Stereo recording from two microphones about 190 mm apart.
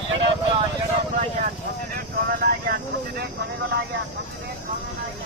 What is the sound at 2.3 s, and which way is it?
Vehicle, 55° right (ahead or behind).